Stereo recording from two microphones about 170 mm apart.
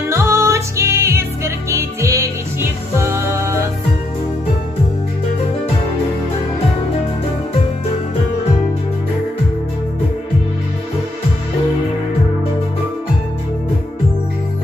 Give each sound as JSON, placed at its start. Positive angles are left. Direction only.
{"t": 0.1, "sound": "music", "side_deg": -15}